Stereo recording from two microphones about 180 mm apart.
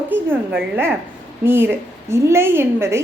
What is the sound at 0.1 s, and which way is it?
A woman's voice, 10° right (ahead or behind).